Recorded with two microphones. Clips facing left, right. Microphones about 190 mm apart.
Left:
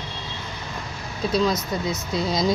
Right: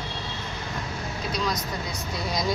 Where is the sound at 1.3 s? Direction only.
25° left (ahead or behind).